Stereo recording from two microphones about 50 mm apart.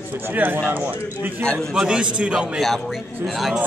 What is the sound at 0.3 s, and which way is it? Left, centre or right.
Speech, right.